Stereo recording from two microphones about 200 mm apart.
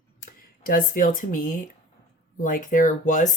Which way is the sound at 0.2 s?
45° left (ahead or behind).